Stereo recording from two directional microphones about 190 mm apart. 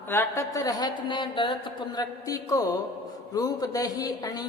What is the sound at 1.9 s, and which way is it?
Speech, 20° left (ahead or behind).